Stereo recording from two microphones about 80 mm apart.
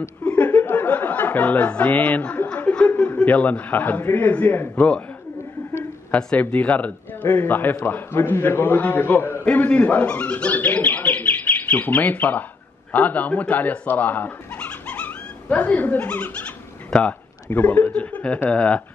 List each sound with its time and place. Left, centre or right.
0.2 s speech: centre
6.1 s a man's voice: centre